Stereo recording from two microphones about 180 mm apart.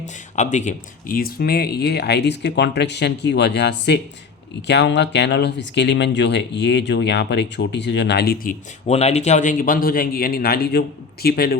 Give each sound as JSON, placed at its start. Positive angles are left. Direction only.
{"t": 0.3, "sound": "speech", "side_deg": 40}
{"t": 8.9, "sound": "speech", "side_deg": 35}